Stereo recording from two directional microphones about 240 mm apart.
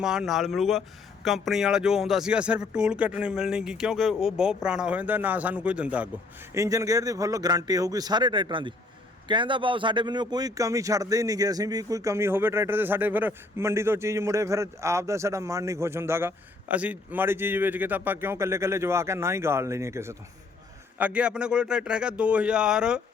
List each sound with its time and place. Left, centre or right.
0.0 s speech: centre